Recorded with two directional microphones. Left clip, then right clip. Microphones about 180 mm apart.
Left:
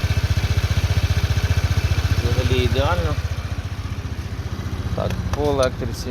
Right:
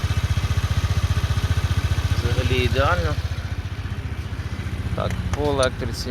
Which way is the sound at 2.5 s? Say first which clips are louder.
Right 1 dB; 15° left (ahead or behind).